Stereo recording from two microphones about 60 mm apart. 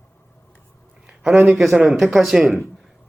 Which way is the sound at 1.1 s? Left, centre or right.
Centre.